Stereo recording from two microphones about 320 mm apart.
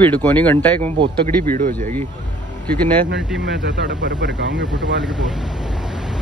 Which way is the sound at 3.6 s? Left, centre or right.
Right.